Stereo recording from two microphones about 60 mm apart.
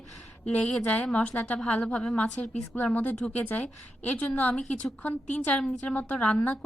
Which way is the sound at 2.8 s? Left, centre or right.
Left.